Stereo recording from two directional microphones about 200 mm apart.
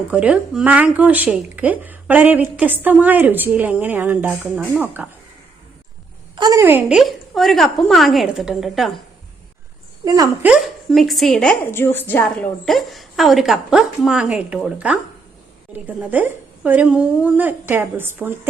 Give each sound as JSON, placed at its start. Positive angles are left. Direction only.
{"t": 0.1, "sound": "speech", "side_deg": -5}
{"t": 6.3, "sound": "a woman's voice", "side_deg": -20}
{"t": 10.0, "sound": "speech", "side_deg": -15}
{"t": 10.5, "sound": "a woman's voice", "side_deg": 0}